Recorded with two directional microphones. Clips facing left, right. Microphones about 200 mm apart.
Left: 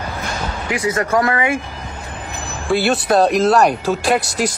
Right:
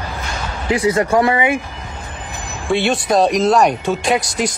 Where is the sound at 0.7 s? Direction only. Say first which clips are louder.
Right 4 dB; 30° right (ahead or behind).